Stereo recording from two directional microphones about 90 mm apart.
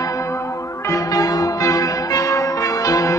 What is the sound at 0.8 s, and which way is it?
Change ringing, 35° left (ahead or behind).